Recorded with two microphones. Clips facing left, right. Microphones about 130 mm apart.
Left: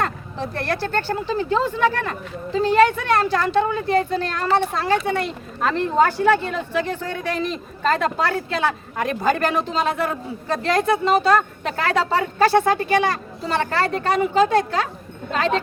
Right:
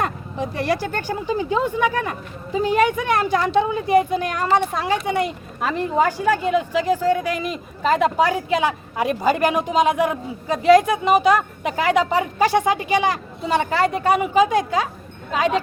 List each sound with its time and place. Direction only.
0.0 s speech: 15° right (ahead or behind)